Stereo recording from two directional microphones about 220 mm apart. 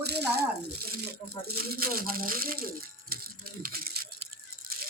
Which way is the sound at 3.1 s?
40° right (ahead or behind).